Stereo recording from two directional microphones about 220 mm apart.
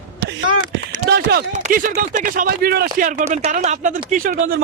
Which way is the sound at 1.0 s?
45° right (ahead or behind).